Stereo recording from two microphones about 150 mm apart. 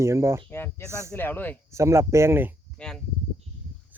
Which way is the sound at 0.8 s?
20° right (ahead or behind).